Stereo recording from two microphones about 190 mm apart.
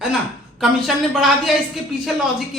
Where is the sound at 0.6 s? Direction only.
Centre (ahead or behind).